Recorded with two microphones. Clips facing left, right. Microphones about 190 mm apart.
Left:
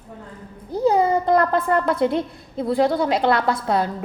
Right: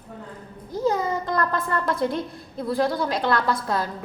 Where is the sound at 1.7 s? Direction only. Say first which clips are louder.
Left 5 dB; 25° left (ahead or behind).